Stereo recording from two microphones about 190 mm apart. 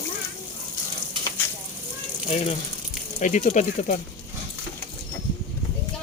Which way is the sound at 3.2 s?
40° left (ahead or behind).